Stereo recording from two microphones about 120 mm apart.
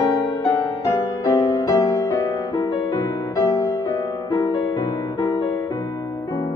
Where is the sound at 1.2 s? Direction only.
30° left (ahead or behind).